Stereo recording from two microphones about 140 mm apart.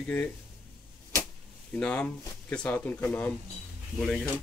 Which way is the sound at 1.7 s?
10° left (ahead or behind).